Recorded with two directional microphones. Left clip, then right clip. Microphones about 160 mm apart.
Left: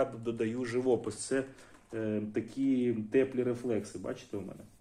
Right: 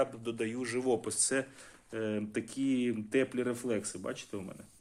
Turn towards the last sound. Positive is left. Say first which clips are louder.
# even
turn(degrees=-65)  # may be behind; listen again after turning